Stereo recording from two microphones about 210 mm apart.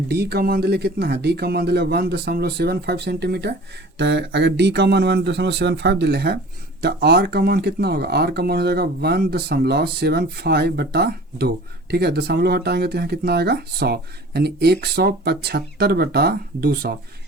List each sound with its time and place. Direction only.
0.1 s speech: 50° right (ahead or behind)